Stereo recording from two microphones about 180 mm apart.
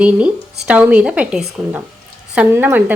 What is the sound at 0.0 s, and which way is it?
Speech, 5° right (ahead or behind).